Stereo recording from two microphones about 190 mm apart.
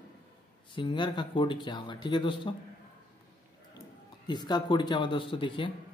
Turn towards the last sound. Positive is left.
turn(degrees=25)  # may be behind; listen again after turning